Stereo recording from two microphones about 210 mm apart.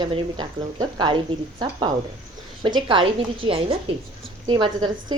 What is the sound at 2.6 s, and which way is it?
A woman's voice, 25° right (ahead or behind).